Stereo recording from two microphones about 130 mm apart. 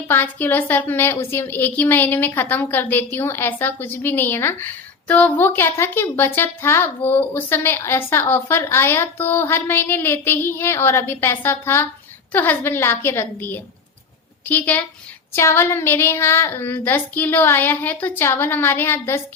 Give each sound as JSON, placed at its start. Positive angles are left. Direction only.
{"t": 0.1, "sound": "a woman's voice", "side_deg": 15}